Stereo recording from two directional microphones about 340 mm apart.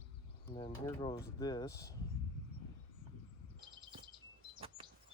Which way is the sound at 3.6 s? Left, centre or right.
Centre.